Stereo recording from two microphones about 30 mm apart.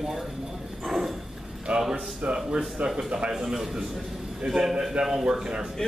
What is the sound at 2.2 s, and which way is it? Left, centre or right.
Speech, right.